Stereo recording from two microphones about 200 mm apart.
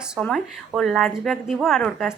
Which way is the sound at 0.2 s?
5° left (ahead or behind).